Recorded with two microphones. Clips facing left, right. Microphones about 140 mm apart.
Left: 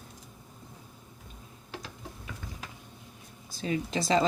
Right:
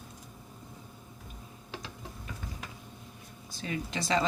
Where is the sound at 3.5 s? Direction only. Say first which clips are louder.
Left 5 dB; 35° left (ahead or behind).